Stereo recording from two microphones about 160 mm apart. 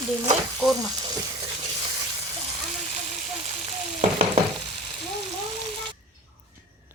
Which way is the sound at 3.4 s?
45° right (ahead or behind).